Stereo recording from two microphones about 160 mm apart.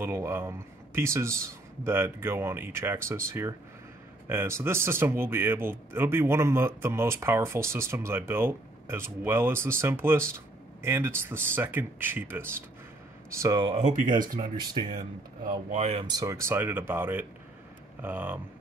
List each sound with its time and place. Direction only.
0.0 s a man's voice: 15° right (ahead or behind)
13.7 s speech: 50° right (ahead or behind)
14.6 s speech: 25° right (ahead or behind)
15.7 s speech: 45° right (ahead or behind)
16.0 s a man's voice: 25° right (ahead or behind)